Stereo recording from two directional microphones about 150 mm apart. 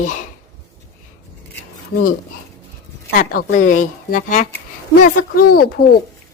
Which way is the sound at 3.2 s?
65° left (ahead or behind).